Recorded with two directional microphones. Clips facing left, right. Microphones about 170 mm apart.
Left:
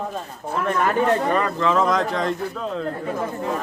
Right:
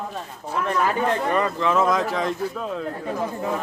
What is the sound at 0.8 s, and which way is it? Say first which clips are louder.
Speech: left 3 dB; 5° right (ahead or behind).